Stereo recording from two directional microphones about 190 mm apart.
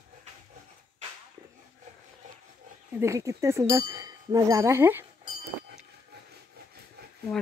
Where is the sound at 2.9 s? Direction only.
15° right (ahead or behind).